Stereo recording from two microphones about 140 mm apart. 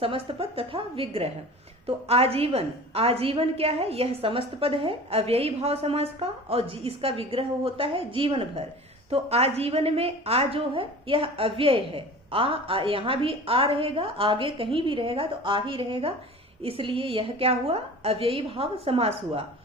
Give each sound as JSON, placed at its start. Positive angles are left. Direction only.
{"t": 0.0, "sound": "a woman's voice", "side_deg": -40}